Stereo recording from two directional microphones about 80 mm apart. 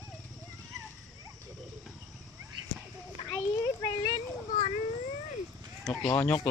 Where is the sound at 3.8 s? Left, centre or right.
Left.